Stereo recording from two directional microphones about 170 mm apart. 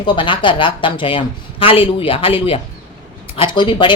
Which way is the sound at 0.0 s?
30° left (ahead or behind).